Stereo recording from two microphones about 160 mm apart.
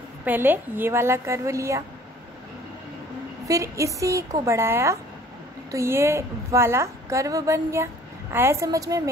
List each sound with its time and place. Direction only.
0.2 s a woman's voice: 10° right (ahead or behind)
3.4 s a woman's voice: 20° right (ahead or behind)